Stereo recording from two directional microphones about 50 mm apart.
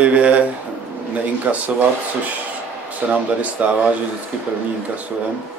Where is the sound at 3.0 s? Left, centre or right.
Right.